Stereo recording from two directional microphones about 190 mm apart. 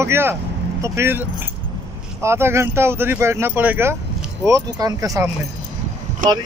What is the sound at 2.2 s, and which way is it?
Speech, 15° right (ahead or behind).